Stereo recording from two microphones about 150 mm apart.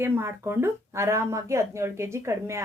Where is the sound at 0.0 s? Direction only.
15° right (ahead or behind).